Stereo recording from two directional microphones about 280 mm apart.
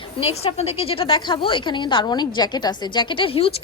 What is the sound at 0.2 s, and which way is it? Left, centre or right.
A woman's voice, left.